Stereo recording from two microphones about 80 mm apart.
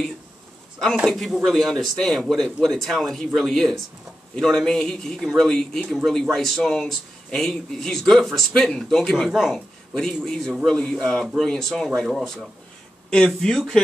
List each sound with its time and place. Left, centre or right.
0.9 s a man's voice: centre
13.1 s speech: centre